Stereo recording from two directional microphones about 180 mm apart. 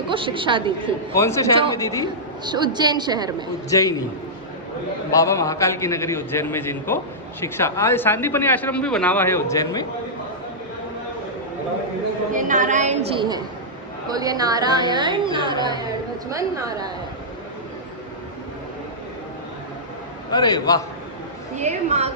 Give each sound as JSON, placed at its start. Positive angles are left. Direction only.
{"t": 0.1, "sound": "a woman's voice", "side_deg": -30}
{"t": 1.1, "sound": "a woman's voice", "side_deg": 15}
{"t": 2.4, "sound": "a woman's voice", "side_deg": -25}
{"t": 3.7, "sound": "a woman's voice", "side_deg": 20}
{"t": 5.1, "sound": "a woman's voice", "side_deg": 15}
{"t": 12.3, "sound": "a woman's voice", "side_deg": -45}
{"t": 13.1, "sound": "a woman's voice", "side_deg": -25}
{"t": 20.3, "sound": "a man's voice", "side_deg": 25}
{"t": 21.6, "sound": "a woman's voice", "side_deg": -40}